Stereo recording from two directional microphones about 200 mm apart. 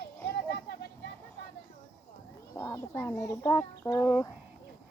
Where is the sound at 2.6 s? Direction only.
10° left (ahead or behind).